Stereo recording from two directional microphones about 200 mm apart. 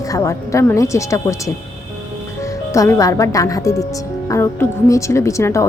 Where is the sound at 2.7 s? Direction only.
15° left (ahead or behind).